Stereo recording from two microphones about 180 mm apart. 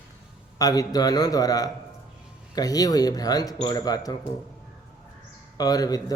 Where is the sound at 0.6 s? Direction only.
20° left (ahead or behind).